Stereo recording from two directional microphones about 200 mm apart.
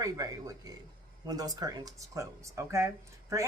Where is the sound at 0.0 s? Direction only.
20° right (ahead or behind).